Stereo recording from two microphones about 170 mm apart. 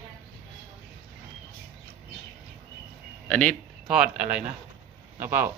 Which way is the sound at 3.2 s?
5° left (ahead or behind).